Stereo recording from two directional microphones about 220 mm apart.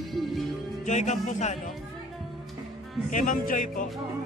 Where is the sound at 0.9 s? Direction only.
30° left (ahead or behind).